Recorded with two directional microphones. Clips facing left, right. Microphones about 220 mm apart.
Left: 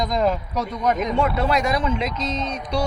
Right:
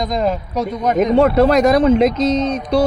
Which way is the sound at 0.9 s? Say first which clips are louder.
Right 10 dB; 40° right (ahead or behind).